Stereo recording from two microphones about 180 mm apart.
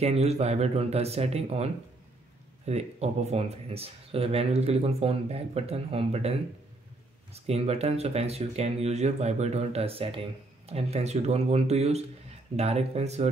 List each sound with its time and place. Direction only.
0.0 s speech: 35° right (ahead or behind)
7.3 s speech: 35° right (ahead or behind)